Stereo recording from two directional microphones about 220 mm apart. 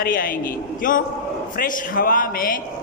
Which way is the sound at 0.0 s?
40° left (ahead or behind).